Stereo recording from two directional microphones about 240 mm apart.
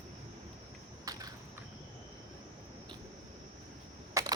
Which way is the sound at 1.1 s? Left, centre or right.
Centre.